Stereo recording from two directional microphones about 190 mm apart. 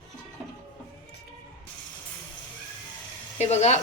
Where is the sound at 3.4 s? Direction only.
35° left (ahead or behind).